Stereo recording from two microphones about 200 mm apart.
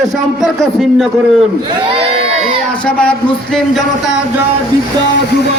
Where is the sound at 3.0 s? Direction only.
5° left (ahead or behind).